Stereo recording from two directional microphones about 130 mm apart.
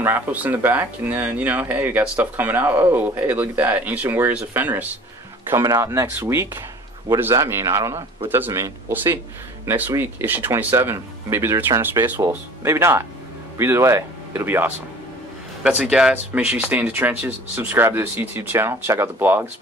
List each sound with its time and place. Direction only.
0.0 s speech: 15° right (ahead or behind)
5.5 s speech: 25° right (ahead or behind)
15.6 s speech: 5° right (ahead or behind)